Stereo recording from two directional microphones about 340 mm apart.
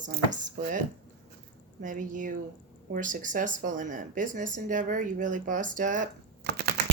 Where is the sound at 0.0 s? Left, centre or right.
Right.